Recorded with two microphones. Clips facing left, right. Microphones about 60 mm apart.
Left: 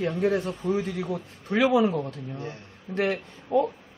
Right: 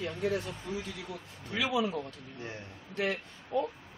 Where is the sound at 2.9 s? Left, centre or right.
Left.